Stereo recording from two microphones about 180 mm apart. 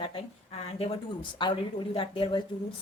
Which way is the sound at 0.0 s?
30° left (ahead or behind).